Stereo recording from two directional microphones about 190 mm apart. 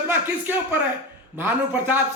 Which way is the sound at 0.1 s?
10° right (ahead or behind).